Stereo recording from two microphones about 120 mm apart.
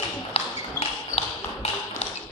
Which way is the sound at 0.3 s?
60° left (ahead or behind).